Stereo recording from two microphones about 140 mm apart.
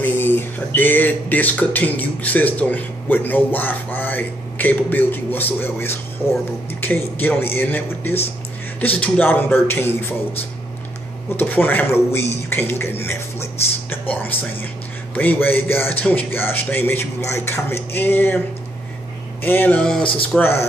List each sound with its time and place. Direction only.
0.0 s speech: 15° left (ahead or behind)
11.3 s speech: 15° left (ahead or behind)
19.4 s speech: 15° left (ahead or behind)